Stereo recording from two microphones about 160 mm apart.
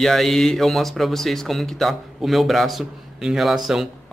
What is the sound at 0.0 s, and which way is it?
Speech, centre (ahead or behind).